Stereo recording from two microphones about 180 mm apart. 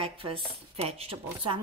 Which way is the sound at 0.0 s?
30° right (ahead or behind).